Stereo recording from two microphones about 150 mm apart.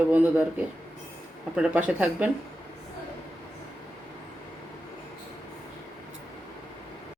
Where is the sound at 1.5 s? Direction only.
10° right (ahead or behind).